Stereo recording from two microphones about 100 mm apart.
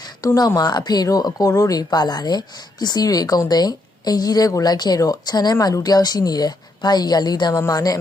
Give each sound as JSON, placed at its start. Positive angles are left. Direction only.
{"t": 0.2, "sound": "speech", "side_deg": 40}